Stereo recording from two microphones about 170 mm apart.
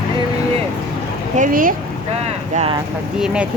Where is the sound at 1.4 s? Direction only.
55° right (ahead or behind).